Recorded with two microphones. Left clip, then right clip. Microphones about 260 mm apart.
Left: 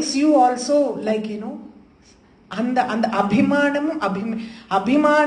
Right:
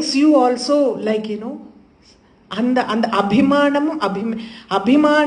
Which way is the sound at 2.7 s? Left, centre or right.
Right.